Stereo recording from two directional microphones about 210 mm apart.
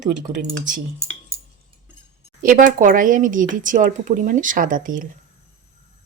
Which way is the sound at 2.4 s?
40° right (ahead or behind).